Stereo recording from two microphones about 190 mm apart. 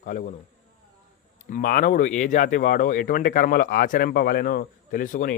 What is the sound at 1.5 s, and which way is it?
A man's voice, 45° left (ahead or behind).